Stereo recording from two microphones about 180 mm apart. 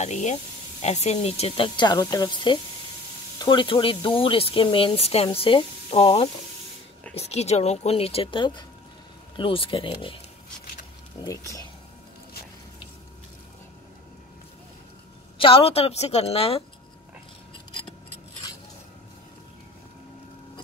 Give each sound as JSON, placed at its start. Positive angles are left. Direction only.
{"t": 0.0, "sound": "a woman's voice", "side_deg": 40}
{"t": 11.1, "sound": "speech", "side_deg": 20}
{"t": 15.3, "sound": "a woman's voice", "side_deg": 30}